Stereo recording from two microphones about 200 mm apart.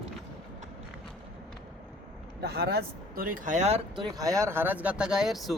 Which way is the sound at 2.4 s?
55° right (ahead or behind).